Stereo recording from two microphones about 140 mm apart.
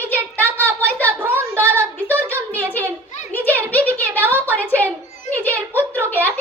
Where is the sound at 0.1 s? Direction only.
15° left (ahead or behind).